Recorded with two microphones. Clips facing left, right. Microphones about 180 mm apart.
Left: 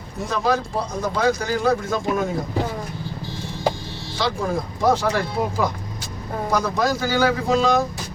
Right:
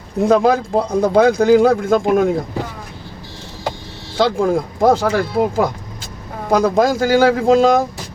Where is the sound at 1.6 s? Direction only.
55° right (ahead or behind).